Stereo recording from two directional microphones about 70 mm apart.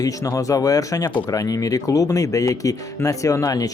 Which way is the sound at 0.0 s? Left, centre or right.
Left.